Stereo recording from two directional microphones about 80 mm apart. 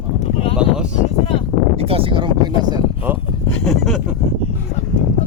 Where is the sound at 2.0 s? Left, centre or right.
Right.